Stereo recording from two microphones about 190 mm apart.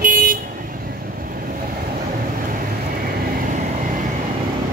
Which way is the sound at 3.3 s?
45° right (ahead or behind).